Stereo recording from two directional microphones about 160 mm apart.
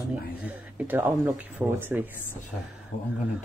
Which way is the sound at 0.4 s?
10° right (ahead or behind).